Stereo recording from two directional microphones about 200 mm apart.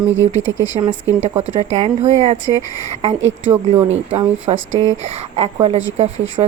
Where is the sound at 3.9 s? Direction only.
30° right (ahead or behind).